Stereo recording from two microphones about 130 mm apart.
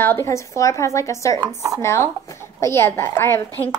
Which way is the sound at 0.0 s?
20° left (ahead or behind).